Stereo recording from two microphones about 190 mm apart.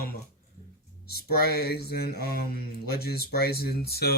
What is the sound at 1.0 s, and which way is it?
Speech, 55° left (ahead or behind).